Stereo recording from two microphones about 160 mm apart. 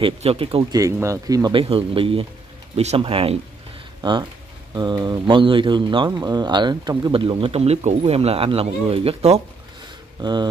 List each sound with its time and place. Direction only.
0.0 s speech: 35° right (ahead or behind)
0.7 s speech: 20° right (ahead or behind); by 9.4 s 40° right (ahead or behind)
10.2 s speech: 25° right (ahead or behind)